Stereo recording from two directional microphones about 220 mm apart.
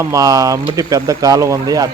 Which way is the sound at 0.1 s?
15° right (ahead or behind).